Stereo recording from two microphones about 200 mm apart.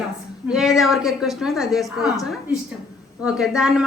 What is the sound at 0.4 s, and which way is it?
Speech, centre (ahead or behind).